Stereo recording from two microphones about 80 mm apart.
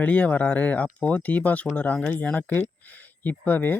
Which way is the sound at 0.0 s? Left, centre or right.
Centre.